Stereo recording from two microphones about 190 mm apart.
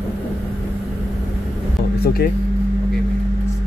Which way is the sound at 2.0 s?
55° left (ahead or behind).